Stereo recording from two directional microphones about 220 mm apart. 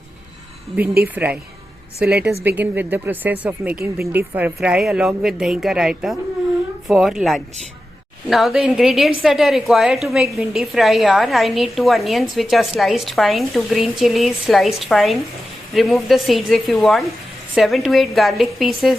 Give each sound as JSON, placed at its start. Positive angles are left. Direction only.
{"t": 1.0, "sound": "a woman's voice", "side_deg": -5}
{"t": 2.0, "sound": "a woman's voice", "side_deg": -45}
{"t": 2.4, "sound": "a woman's voice", "side_deg": -10}